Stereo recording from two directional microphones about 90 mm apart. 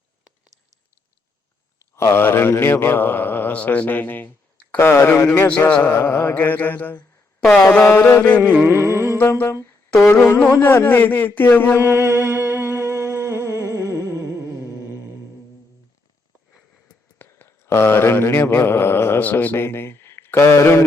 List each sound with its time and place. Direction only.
2.0 s speech: 25° left (ahead or behind)
7.7 s mantra: 15° left (ahead or behind)
8.4 s a sound: 25° right (ahead or behind)
9.1 s humming: 25° left (ahead or behind)
10.1 s speech: 25° left (ahead or behind)
11.8 s humming: 20° right (ahead or behind)
13.7 s music: 30° left (ahead or behind)
17.2 s mantra: 25° left (ahead or behind)